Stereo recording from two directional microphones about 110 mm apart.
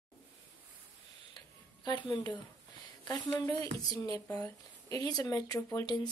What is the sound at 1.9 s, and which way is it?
Speech, 45° left (ahead or behind).